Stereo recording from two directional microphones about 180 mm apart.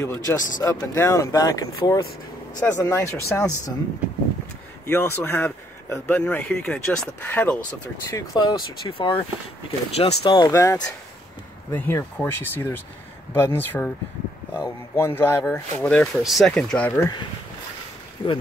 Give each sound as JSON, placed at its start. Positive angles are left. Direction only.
{"t": 0.0, "sound": "speech", "side_deg": 15}
{"t": 4.8, "sound": "speech", "side_deg": 10}
{"t": 8.1, "sound": "speech", "side_deg": 20}
{"t": 10.3, "sound": "speech", "side_deg": 20}
{"t": 18.2, "sound": "speech", "side_deg": 25}